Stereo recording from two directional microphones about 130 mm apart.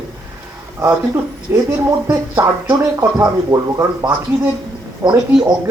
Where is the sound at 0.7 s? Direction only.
25° right (ahead or behind).